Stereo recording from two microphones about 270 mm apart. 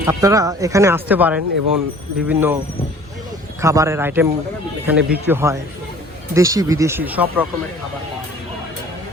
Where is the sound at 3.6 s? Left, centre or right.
Centre.